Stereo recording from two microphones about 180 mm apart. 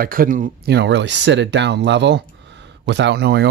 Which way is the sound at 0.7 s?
80° right.